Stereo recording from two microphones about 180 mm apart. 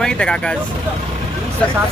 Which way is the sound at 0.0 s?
5° left (ahead or behind).